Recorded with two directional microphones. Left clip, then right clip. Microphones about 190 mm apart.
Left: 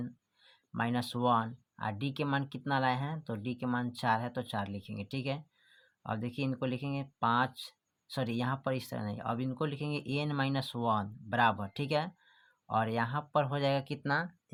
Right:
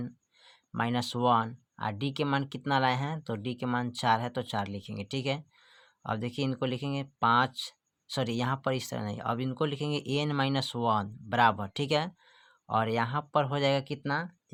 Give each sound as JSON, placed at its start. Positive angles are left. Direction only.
{"t": 0.0, "sound": "speech", "side_deg": -25}